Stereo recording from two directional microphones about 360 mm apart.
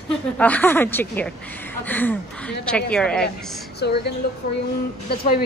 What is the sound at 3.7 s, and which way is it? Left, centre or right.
A woman's voice, left.